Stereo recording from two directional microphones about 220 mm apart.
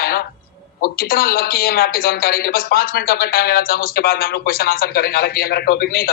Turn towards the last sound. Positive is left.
turn(degrees=45)  # may be behind; listen again after turning